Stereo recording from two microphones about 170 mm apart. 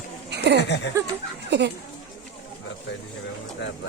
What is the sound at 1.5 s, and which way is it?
Speech, 85° right.